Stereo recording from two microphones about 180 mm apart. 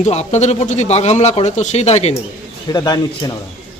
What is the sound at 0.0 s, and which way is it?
Speech, 40° left (ahead or behind).